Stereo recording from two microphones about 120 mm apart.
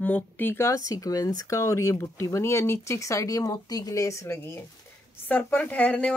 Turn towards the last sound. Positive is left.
turn(degrees=10)  # may be behind; listen again after turning